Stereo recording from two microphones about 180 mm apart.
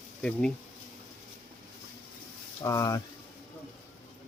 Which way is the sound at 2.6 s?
20° left (ahead or behind).